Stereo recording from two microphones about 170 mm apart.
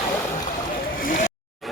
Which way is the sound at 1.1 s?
50° left (ahead or behind).